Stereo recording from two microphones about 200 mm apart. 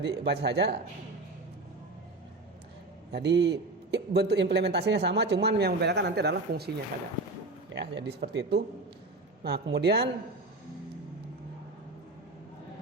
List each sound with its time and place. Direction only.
0.0 s a man's voice: 60° right (ahead or behind)
3.1 s a man's voice: 55° right (ahead or behind)
7.7 s a man's voice: 60° right (ahead or behind)